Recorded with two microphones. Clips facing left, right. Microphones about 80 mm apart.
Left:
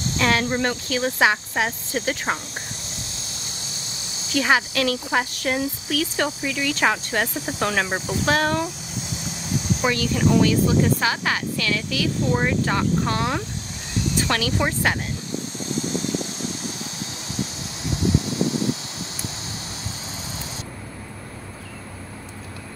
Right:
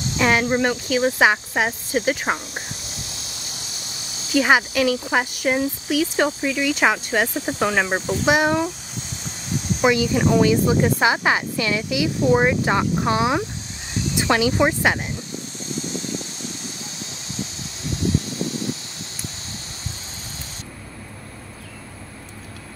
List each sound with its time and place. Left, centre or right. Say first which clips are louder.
0.2 s speech: right 3 dB; centre
4.3 s speech: right 3 dB; centre
7.3 s speech: right 3 dB; right
7.6 s speech: right 3 dB; centre
9.8 s speech: right 4 dB; centre